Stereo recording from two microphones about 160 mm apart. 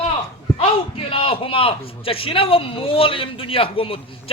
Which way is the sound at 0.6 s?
35° left (ahead or behind).